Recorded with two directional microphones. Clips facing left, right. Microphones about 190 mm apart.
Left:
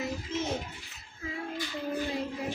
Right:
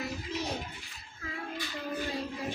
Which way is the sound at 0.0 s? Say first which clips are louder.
Left 3 dB; 20° left (ahead or behind).